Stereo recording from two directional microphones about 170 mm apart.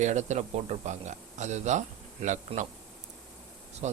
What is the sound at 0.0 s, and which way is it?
Speech, 45° right (ahead or behind).